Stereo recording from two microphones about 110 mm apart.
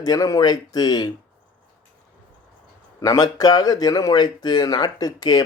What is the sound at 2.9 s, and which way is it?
Speech, 35° left (ahead or behind).